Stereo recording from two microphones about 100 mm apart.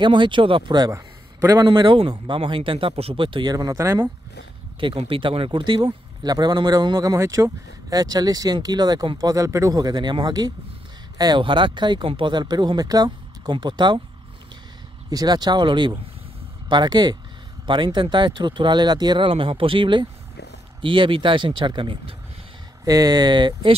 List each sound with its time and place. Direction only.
0.0 s speech: 55° right (ahead or behind)
0.9 s a sound: 35° right (ahead or behind)
1.7 s speech: 50° right (ahead or behind)
3.5 s speech: 30° right (ahead or behind)
4.7 s speech: 60° right (ahead or behind)
9.3 s speech: 30° right (ahead or behind); by 14.0 s 50° right (ahead or behind)
15.0 s speech: 40° right (ahead or behind)
22.8 s speech: 40° right (ahead or behind)